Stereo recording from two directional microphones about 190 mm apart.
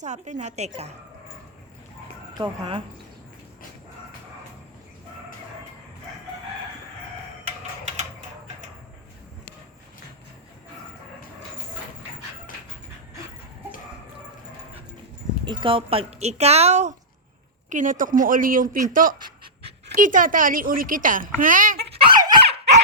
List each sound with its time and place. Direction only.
0.0 s speech: 40° right (ahead or behind)
2.4 s speech: 25° right (ahead or behind)
7.4 s a sound: 35° right (ahead or behind)
15.4 s a woman's voice: 25° right (ahead or behind); by 19.1 s 45° right (ahead or behind)
19.2 s dog: 30° right (ahead or behind)
20.0 s a woman's voice: 45° right (ahead or behind)
22.2 s dog: 25° right (ahead or behind)